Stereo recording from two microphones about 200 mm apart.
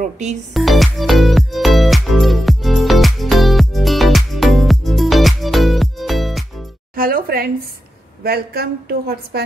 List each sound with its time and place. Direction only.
0.0 s speech: 35° right (ahead or behind)
0.6 s music: centre (ahead or behind)
7.0 s a sound: 45° right (ahead or behind)
8.2 s a woman's voice: 50° right (ahead or behind)